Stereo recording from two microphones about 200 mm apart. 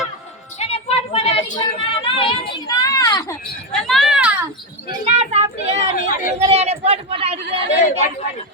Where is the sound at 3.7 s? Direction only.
Centre (ahead or behind).